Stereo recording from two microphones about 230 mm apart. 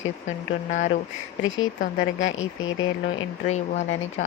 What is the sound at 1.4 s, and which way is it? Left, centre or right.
Speech, left.